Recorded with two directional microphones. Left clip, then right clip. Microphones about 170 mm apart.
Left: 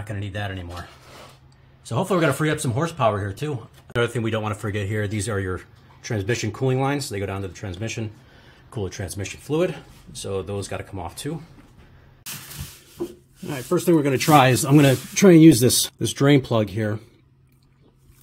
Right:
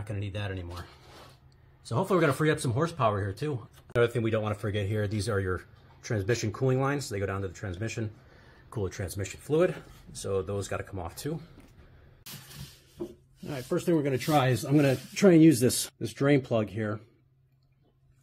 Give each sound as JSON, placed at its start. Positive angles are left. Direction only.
{"t": 0.0, "sound": "speech", "side_deg": -5}
{"t": 1.9, "sound": "speech", "side_deg": -10}
{"t": 13.5, "sound": "speech", "side_deg": 25}
{"t": 15.1, "sound": "speech", "side_deg": 20}
{"t": 16.0, "sound": "speech", "side_deg": 30}